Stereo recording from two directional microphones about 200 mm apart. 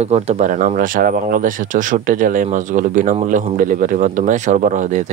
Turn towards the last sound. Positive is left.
turn(degrees=-40)  # may be behind; listen again after turning